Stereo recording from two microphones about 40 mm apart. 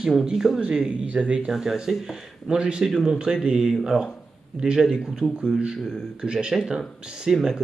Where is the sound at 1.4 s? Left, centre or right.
Centre.